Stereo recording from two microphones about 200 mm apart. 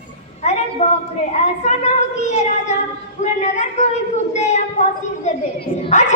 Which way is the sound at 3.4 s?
35° left (ahead or behind).